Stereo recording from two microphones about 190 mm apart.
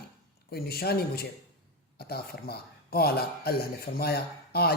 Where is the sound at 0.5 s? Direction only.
55° left (ahead or behind).